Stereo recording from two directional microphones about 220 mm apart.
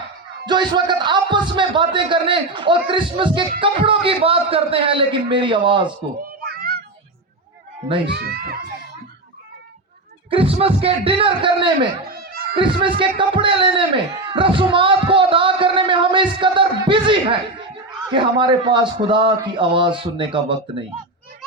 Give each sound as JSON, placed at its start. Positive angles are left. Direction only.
{"t": 0.4, "sound": "a man's voice", "side_deg": -20}
{"t": 6.6, "sound": "music", "side_deg": -45}
{"t": 8.1, "sound": "speech", "side_deg": -45}
{"t": 10.2, "sound": "a man's voice", "side_deg": -25}
{"t": 12.0, "sound": "a sound", "side_deg": -45}
{"t": 12.8, "sound": "a man's voice", "side_deg": -25}